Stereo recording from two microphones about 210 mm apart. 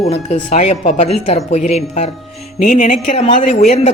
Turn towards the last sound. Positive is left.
turn(degrees=30)  # may be behind; listen again after turning